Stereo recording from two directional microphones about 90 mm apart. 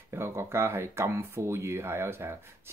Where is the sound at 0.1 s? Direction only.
25° right (ahead or behind).